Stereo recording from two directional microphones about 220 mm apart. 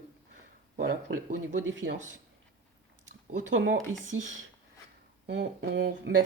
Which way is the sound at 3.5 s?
55° right (ahead or behind).